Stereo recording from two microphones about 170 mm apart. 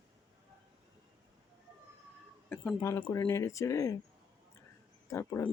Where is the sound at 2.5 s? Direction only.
15° left (ahead or behind).